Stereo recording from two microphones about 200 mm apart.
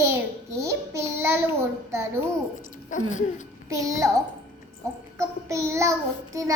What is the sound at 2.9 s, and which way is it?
Speech, 40° left (ahead or behind).